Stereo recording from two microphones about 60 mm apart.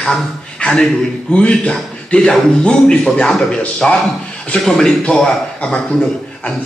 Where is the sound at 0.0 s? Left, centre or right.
Centre.